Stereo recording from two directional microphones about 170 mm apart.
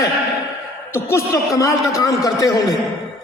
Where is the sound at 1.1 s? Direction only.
15° left (ahead or behind).